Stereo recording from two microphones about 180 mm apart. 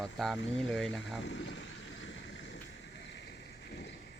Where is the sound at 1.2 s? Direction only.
70° left (ahead or behind).